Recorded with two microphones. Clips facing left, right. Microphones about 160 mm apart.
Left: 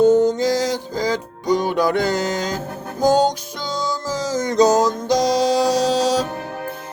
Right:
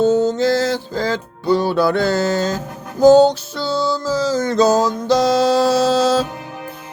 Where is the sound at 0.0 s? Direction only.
15° left (ahead or behind).